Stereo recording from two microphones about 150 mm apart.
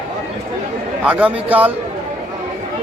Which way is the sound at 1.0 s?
5° right (ahead or behind).